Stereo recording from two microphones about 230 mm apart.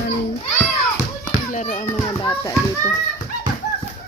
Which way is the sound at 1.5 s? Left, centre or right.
Left.